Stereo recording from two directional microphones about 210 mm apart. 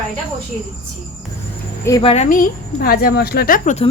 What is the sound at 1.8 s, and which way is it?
A woman's voice, 20° left (ahead or behind).